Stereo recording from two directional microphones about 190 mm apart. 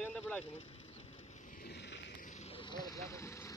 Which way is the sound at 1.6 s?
65° left (ahead or behind).